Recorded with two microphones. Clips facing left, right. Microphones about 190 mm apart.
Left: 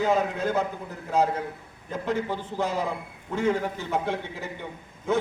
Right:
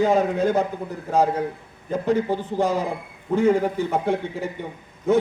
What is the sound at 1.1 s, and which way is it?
A man's voice, 50° right (ahead or behind).